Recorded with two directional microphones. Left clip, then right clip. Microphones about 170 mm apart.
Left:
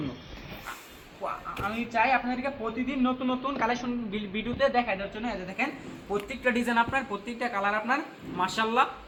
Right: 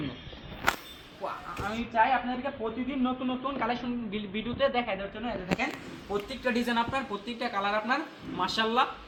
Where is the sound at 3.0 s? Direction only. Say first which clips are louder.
Left 3 dB; 20° left (ahead or behind); by 8.9 s centre (ahead or behind).